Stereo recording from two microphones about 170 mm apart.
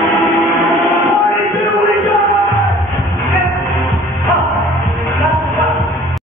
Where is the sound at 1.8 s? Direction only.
5° right (ahead or behind).